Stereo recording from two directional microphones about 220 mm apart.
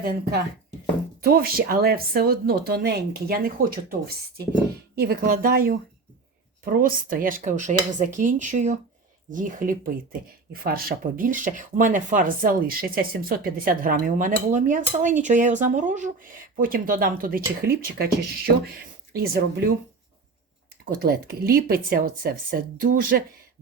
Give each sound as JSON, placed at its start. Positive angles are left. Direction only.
{"t": 0.0, "sound": "speech", "side_deg": -45}
{"t": 19.1, "sound": "speech", "side_deg": -45}
{"t": 20.8, "sound": "speech", "side_deg": -40}